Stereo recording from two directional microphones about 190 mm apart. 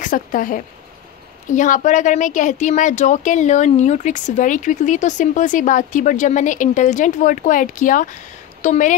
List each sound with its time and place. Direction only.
0.0 s speech: 45° left (ahead or behind)